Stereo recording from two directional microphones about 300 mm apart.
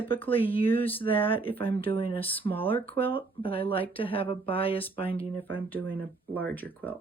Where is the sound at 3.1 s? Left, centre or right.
Centre.